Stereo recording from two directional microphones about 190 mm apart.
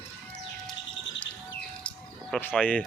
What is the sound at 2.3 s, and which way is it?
Speech, 5° left (ahead or behind).